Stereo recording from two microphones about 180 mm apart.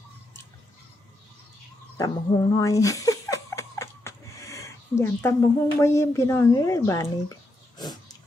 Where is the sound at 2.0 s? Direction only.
20° left (ahead or behind).